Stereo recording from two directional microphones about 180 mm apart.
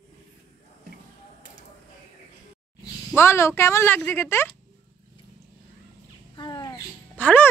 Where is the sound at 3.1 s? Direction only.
15° left (ahead or behind).